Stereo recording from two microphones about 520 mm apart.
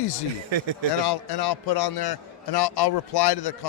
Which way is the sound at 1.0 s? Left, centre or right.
Left.